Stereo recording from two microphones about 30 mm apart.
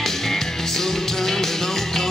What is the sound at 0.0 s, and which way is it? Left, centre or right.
Music, centre.